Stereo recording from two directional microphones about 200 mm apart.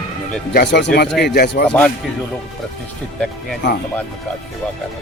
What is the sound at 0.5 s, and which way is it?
Speech, 60° left (ahead or behind).